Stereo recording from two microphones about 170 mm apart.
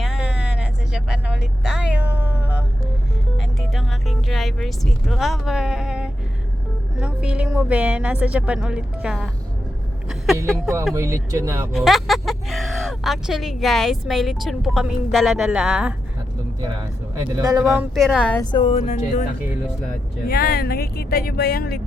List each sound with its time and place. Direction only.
0.0 s vehicle: 5° right (ahead or behind)
3.3 s music: centre (ahead or behind)
7.0 s speech: 5° right (ahead or behind)
10.9 s speech: 20° right (ahead or behind)
11.7 s speech: centre (ahead or behind)
17.2 s speech: 20° right (ahead or behind)
17.9 s speech: centre (ahead or behind)
18.5 s speech: 35° left (ahead or behind)
20.2 s speech: 60° left (ahead or behind)